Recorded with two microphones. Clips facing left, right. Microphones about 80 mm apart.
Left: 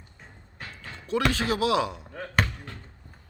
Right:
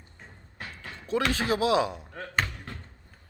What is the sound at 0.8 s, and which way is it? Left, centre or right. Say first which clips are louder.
Speech: left 2 dB; right.